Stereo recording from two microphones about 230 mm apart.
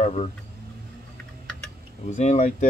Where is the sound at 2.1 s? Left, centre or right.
Left.